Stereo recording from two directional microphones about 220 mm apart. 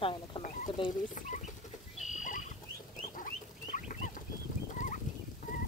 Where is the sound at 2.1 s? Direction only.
35° left (ahead or behind).